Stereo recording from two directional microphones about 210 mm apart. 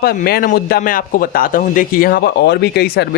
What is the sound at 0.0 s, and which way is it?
Speech, 45° left (ahead or behind).